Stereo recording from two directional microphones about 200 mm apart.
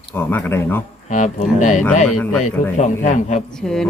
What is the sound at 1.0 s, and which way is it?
Speech, 35° left (ahead or behind).